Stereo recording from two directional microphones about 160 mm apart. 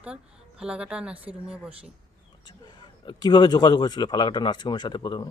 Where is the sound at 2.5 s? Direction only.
25° left (ahead or behind).